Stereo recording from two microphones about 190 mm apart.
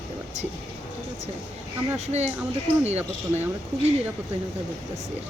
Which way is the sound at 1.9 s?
35° right (ahead or behind).